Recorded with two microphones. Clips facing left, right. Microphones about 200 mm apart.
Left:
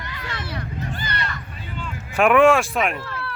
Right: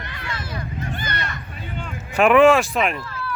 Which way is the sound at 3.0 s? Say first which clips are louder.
Even; 70° left (ahead or behind).